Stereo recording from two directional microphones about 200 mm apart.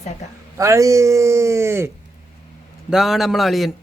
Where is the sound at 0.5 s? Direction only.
15° right (ahead or behind).